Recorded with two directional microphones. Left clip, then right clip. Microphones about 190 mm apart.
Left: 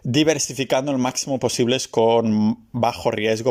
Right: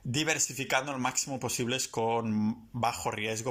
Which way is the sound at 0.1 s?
40° left (ahead or behind).